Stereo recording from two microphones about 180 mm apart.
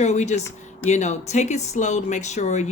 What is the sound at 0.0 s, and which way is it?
Speech, 40° left (ahead or behind).